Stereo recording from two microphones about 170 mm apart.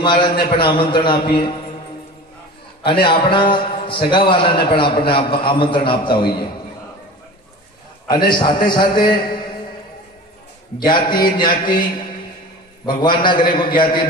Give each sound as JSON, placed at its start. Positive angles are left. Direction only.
{"t": 0.0, "sound": "a man's voice", "side_deg": 30}
{"t": 2.9, "sound": "a man's voice", "side_deg": 30}
{"t": 8.1, "sound": "a man's voice", "side_deg": 25}
{"t": 10.8, "sound": "a man's voice", "side_deg": 25}
{"t": 13.0, "sound": "a man's voice", "side_deg": 30}